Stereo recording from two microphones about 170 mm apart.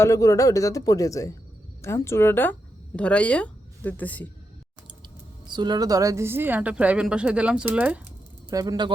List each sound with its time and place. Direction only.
0.0 s speech: 20° left (ahead or behind)
5.5 s a woman's voice: 25° right (ahead or behind); by 8.0 s 10° right (ahead or behind)
8.4 s speech: 20° right (ahead or behind)